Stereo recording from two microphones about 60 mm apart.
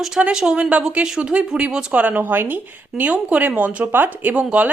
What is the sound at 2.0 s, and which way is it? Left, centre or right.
Speech, right.